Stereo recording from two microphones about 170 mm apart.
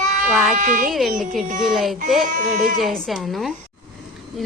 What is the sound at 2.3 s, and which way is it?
Speech, 50° right (ahead or behind).